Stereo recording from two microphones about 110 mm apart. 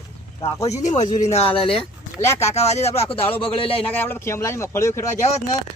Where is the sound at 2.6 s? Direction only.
80° left; by 3.8 s 55° left (ahead or behind).